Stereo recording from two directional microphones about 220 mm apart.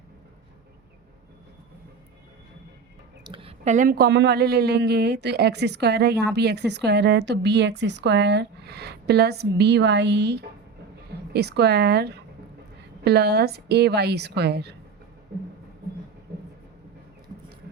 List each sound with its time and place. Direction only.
3.2 s a woman's voice: 25° right (ahead or behind); by 14.8 s 50° right (ahead or behind)